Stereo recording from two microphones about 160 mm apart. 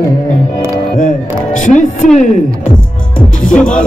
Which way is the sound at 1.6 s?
50° left (ahead or behind).